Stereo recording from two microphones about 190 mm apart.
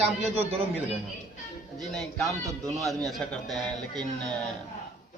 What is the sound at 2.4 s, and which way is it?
Speech, 15° right (ahead or behind).